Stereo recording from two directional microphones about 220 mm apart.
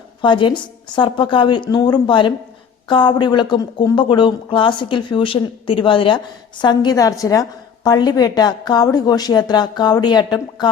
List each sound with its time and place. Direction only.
0.2 s speech: 20° left (ahead or behind)